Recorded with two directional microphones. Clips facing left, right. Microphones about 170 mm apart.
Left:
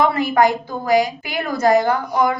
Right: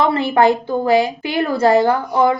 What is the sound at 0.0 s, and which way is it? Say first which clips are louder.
A woman's voice: right 2 dB; 30° right (ahead or behind).